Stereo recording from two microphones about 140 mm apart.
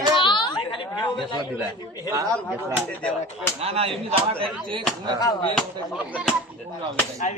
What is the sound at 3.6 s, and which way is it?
Speech, 45° right (ahead or behind).